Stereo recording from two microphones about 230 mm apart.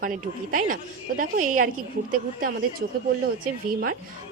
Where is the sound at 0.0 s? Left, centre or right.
Right.